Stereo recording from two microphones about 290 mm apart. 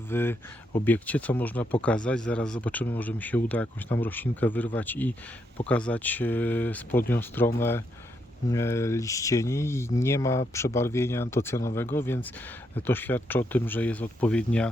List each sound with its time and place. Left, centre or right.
0.1 s speech: centre